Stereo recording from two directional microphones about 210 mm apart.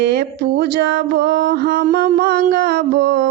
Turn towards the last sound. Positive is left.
turn(degrees=-50)  # may be behind; listen again after turning